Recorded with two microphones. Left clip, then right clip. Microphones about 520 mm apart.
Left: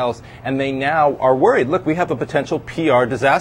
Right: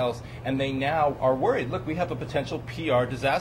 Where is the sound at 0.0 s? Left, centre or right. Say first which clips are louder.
Left 7 dB; left.